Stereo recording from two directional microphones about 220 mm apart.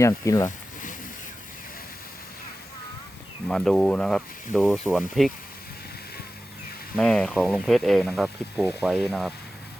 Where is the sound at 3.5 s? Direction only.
5° left (ahead or behind).